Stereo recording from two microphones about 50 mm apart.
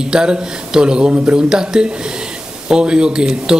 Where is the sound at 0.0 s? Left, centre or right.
Centre.